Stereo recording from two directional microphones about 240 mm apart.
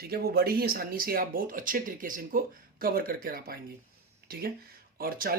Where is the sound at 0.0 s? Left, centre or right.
Right.